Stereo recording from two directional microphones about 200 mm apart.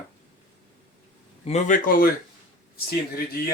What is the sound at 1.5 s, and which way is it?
Speech, 35° left (ahead or behind).